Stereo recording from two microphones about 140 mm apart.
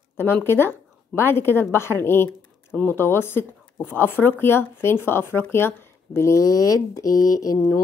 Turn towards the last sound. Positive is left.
turn(degrees=25)  # may be behind; listen again after turning